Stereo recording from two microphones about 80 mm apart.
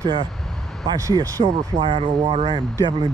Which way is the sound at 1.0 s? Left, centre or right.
Right.